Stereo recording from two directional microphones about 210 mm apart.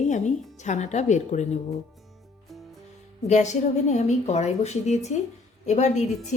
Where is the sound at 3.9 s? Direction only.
35° left (ahead or behind).